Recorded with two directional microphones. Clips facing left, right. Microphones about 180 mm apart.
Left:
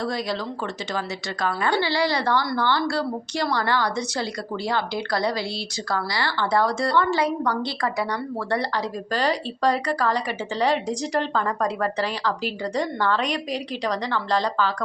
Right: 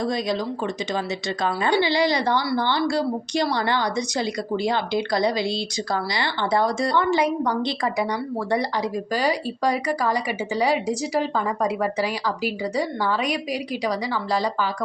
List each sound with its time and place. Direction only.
0.0 s a woman's voice: 20° right (ahead or behind)
9.1 s a woman's voice: 10° right (ahead or behind)